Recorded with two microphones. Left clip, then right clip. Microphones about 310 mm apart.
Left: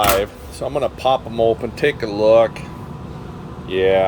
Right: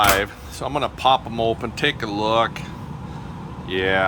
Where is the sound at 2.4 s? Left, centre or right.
Centre.